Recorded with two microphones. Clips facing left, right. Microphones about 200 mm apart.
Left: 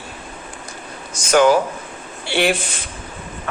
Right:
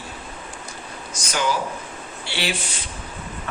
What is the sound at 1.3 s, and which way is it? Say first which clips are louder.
A man's voice: left 11 dB; 55° left (ahead or behind).